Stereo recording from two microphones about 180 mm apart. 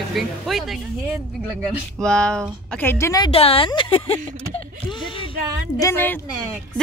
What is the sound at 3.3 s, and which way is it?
Speech, 30° left (ahead or behind).